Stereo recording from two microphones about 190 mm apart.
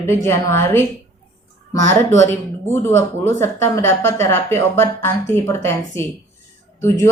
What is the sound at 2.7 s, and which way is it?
A woman's voice, 15° left (ahead or behind).